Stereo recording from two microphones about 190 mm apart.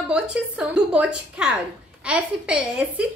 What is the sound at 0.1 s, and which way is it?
A woman's voice, 5° right (ahead or behind).